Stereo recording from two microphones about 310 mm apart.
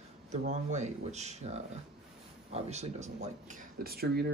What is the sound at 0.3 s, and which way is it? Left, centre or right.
Speech, right.